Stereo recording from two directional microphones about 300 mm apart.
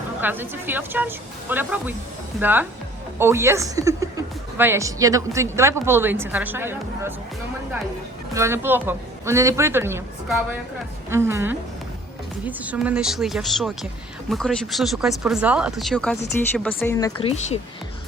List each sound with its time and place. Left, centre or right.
0.2 s a woman's voice: centre
8.3 s a woman's voice: centre
17.2 s speech: centre